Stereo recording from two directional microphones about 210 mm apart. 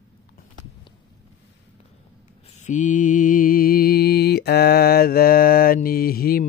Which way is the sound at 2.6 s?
35° left (ahead or behind).